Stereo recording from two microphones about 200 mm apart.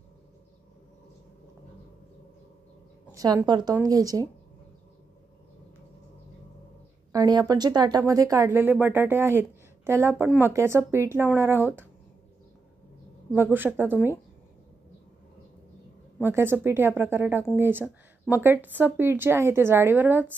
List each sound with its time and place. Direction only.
3.1 s a woman's voice: 15° right (ahead or behind)
7.1 s speech: 20° right (ahead or behind)
13.3 s speech: 10° right (ahead or behind)
16.2 s speech: 10° right (ahead or behind)